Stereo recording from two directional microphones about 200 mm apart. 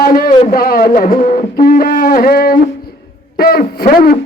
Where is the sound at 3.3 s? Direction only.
50° left (ahead or behind).